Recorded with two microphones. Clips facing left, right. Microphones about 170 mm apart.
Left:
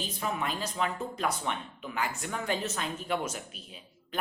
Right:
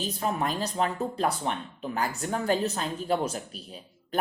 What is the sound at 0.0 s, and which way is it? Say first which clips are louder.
Speech: right 4 dB; 40° right (ahead or behind).